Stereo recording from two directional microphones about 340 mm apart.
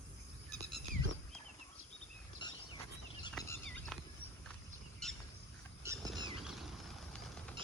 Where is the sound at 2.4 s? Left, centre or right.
Centre.